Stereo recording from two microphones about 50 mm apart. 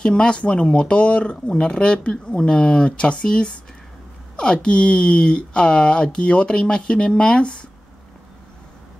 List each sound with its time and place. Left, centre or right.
0.0 s speech: centre